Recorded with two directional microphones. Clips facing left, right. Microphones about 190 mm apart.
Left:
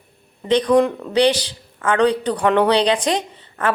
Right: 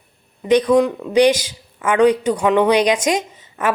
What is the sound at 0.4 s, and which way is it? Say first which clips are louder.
Speech: right 1 dB; 10° right (ahead or behind).